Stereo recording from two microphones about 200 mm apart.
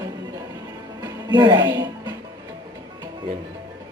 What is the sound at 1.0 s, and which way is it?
Speech, 20° right (ahead or behind).